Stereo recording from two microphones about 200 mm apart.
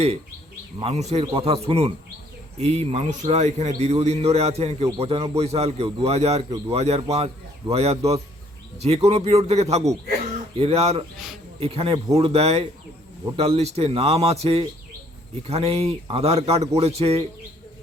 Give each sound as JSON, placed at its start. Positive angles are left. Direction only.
{"t": 0.8, "sound": "a man's voice", "side_deg": -35}